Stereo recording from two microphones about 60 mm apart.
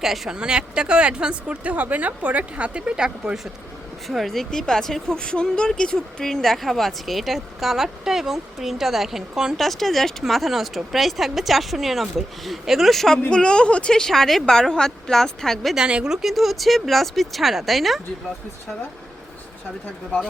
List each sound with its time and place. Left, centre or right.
0.0 s speech: centre
4.1 s speech: centre
9.6 s speech: centre
13.3 s a woman's voice: centre
15.7 s speech: centre